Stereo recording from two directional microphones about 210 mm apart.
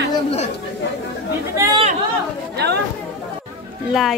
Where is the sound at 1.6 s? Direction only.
15° right (ahead or behind).